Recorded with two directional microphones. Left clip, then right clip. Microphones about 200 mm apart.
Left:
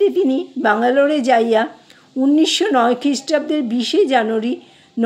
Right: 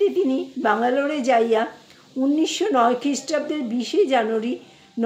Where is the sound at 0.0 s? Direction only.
45° left (ahead or behind).